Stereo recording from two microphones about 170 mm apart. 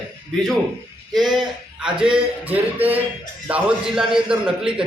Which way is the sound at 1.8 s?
5° right (ahead or behind).